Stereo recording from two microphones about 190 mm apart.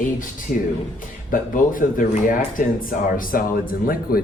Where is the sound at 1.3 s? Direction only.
45° left (ahead or behind).